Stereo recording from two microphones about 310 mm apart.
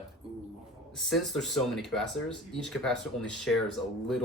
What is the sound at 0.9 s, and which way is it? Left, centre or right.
Speech, centre.